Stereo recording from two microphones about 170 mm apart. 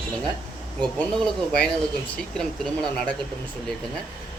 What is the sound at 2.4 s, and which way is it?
Speech, 5° left (ahead or behind).